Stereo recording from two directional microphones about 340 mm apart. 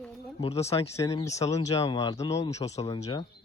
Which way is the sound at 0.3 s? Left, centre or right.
Centre.